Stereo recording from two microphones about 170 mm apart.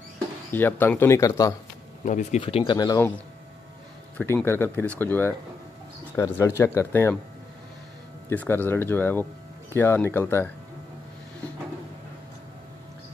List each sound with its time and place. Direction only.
0.5 s speech: 10° left (ahead or behind)
2.0 s speech: 45° left (ahead or behind)
2.4 s speech: 30° left (ahead or behind)
4.2 s speech: 10° left (ahead or behind)
8.3 s speech: 10° left (ahead or behind)